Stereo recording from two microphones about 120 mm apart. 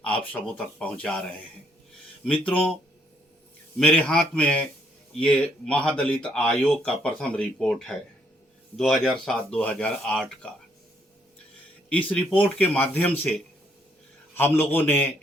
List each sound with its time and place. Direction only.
0.3 s a man's voice: 10° left (ahead or behind)
3.8 s a man's voice: 10° left (ahead or behind)
11.9 s a man's voice: 10° left (ahead or behind)
14.3 s a man's voice: 15° left (ahead or behind)